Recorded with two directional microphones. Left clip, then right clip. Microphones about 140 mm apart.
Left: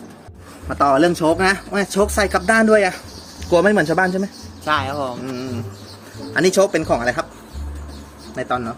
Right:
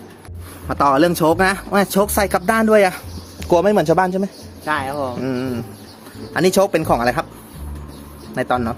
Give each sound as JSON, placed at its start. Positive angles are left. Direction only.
{"t": 0.8, "sound": "speech", "side_deg": -45}
{"t": 4.6, "sound": "speech", "side_deg": -5}
{"t": 5.2, "sound": "speech", "side_deg": -60}
{"t": 8.4, "sound": "speech", "side_deg": -75}